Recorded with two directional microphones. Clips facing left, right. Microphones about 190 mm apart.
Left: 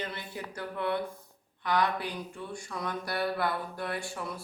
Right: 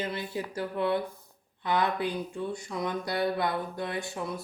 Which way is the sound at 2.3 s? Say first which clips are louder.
Right 6 dB; 15° right (ahead or behind).